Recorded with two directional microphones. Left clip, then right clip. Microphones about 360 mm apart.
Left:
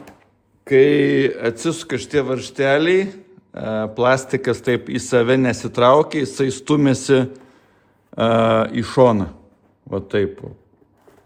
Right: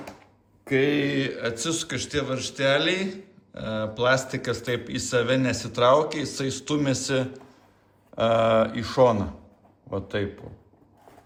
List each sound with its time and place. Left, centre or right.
0.6 s a man's voice: left